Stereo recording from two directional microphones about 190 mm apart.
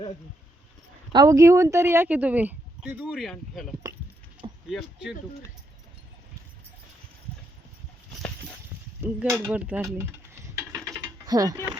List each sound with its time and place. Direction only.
1.1 s speech: 20° right (ahead or behind); by 5.1 s centre (ahead or behind)
9.3 s speech: 5° right (ahead or behind)
10.9 s mechanisms: 20° right (ahead or behind)